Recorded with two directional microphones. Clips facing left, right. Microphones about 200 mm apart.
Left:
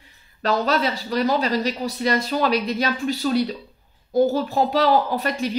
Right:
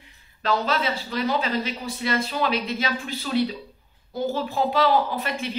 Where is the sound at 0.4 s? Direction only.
40° left (ahead or behind).